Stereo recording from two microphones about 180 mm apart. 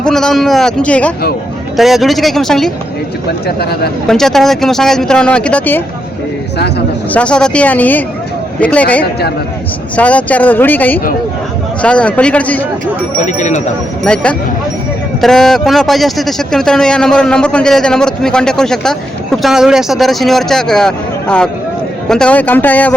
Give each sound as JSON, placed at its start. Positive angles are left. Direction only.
{"t": 0.0, "sound": "a man's voice", "side_deg": 0}
{"t": 3.4, "sound": "speech", "side_deg": 60}
{"t": 4.0, "sound": "a man's voice", "side_deg": 0}
{"t": 7.1, "sound": "speech", "side_deg": 5}
{"t": 13.2, "sound": "speech", "side_deg": 40}
{"t": 14.0, "sound": "a man's voice", "side_deg": 5}